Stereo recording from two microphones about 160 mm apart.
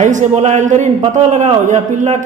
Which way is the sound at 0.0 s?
50° right (ahead or behind).